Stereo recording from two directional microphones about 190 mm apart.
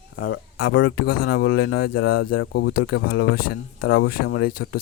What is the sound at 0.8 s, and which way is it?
Speech, 55° left (ahead or behind).